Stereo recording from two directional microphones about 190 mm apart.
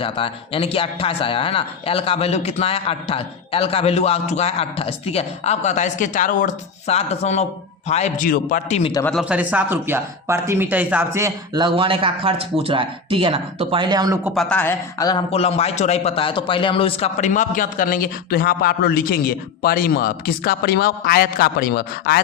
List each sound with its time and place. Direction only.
0.0 s a man's voice: 30° left (ahead or behind); by 8.8 s 45° left (ahead or behind)
8.8 s a man's voice: 20° left (ahead or behind)
9.2 s speech: 5° right (ahead or behind); by 14.2 s 20° right (ahead or behind)
14.3 s speech: 10° left (ahead or behind)
15.3 s a man's voice: 30° left (ahead or behind); by 22.2 s 55° left (ahead or behind)